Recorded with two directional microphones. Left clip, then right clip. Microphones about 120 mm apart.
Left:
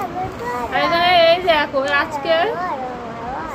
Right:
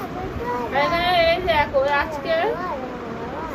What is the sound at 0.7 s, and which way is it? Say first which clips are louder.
A woman's voice: left 5 dB; 40° left (ahead or behind).